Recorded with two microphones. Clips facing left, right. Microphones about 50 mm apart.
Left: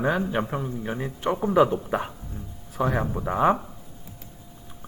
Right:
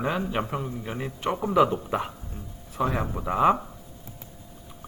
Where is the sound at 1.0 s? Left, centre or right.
Right.